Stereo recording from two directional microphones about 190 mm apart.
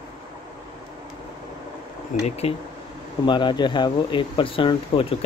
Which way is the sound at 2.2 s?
30° left (ahead or behind).